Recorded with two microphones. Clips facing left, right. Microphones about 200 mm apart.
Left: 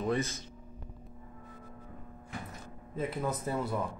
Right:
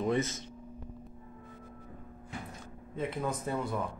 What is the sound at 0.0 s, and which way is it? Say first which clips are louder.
Speech: right 1 dB; 20° right (ahead or behind).